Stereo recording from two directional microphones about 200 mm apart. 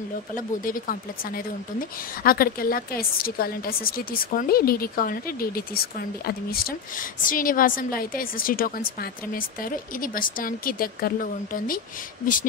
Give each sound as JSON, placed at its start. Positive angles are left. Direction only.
{"t": 0.7, "sound": "a woman's voice", "side_deg": 45}